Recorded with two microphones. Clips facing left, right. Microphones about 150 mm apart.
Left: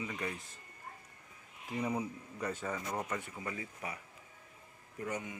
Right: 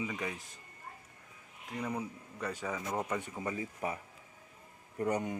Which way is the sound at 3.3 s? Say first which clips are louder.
Right 5 dB; 25° right (ahead or behind).